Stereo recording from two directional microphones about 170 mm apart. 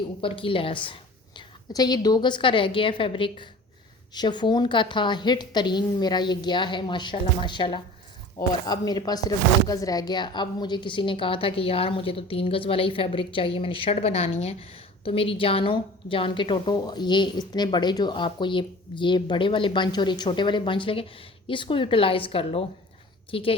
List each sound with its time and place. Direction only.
0.2 s a woman's voice: 30° left (ahead or behind)